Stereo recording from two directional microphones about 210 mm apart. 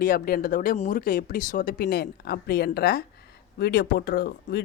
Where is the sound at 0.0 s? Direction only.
45° left (ahead or behind).